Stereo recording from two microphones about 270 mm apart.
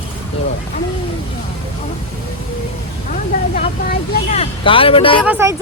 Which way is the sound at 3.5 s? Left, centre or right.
Left.